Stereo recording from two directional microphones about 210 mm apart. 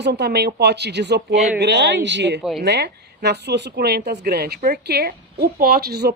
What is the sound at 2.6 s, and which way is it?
Speech, 50° right (ahead or behind).